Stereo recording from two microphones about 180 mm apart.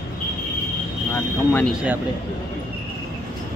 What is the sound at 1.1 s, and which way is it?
Cricket, 10° left (ahead or behind).